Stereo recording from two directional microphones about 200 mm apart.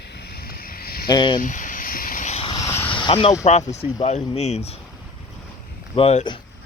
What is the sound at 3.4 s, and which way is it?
Speech, 35° left (ahead or behind).